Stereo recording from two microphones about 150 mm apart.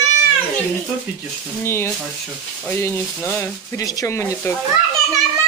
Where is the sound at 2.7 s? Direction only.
15° left (ahead or behind).